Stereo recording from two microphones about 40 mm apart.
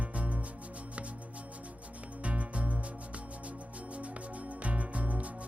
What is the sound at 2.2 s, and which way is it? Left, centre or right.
Music, right.